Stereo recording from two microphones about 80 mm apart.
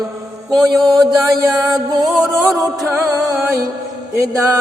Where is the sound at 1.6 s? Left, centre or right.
Right.